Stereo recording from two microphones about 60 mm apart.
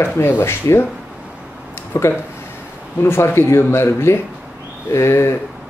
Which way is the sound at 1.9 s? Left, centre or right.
Left.